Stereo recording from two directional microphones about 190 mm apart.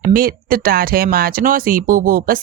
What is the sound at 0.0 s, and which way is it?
Speech, 50° right (ahead or behind).